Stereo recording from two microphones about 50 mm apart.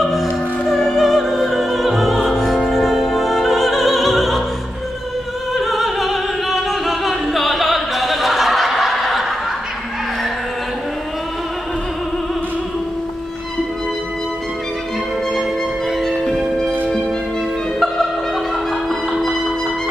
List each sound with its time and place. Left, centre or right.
0.0 s opera: centre
5.5 s opera: centre
16.0 s music: centre
17.7 s music: centre